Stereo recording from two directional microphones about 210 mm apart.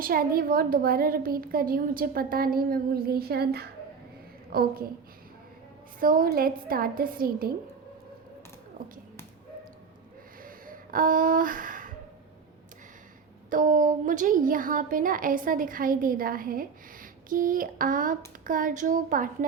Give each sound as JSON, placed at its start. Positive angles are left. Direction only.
{"t": 0.0, "sound": "a woman's voice", "side_deg": -45}
{"t": 6.0, "sound": "a woman's voice", "side_deg": -40}
{"t": 10.4, "sound": "a sound", "side_deg": -40}
{"t": 13.5, "sound": "a woman's voice", "side_deg": -40}